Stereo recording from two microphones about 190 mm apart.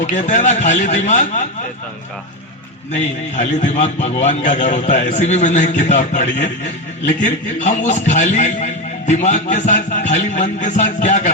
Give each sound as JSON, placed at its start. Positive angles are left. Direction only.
{"t": 0.0, "sound": "a man's voice", "side_deg": 40}
{"t": 2.9, "sound": "a man's voice", "side_deg": 40}